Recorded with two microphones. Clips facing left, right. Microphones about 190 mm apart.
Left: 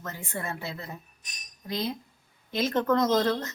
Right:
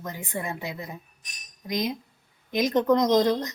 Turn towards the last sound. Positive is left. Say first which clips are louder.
# right 3 dB
turn(degrees=-15)  # may be behind; listen again after turning